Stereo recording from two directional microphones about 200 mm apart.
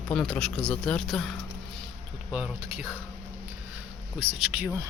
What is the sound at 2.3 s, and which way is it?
Speech, 5° right (ahead or behind).